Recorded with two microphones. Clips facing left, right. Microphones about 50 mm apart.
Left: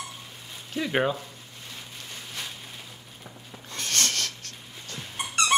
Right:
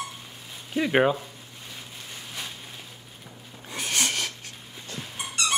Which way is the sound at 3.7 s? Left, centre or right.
Centre.